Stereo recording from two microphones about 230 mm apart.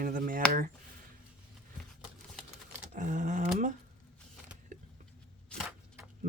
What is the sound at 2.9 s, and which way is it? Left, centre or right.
Speech, right.